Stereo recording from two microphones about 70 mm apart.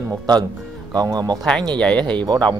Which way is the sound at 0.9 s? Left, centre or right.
Right.